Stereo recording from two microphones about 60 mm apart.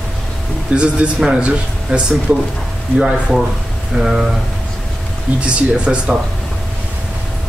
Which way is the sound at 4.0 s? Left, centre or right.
Centre.